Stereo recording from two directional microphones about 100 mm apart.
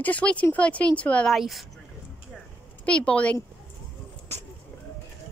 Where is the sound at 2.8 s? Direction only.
10° left (ahead or behind).